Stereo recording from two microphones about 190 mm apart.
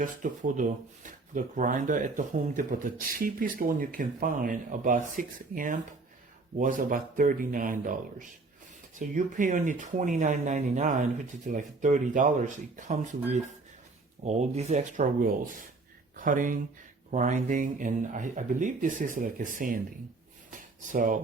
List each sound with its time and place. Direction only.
0.0 s speech: 45° right (ahead or behind)
9.0 s speech: 45° right (ahead or behind)
20.5 s a sound: 45° right (ahead or behind)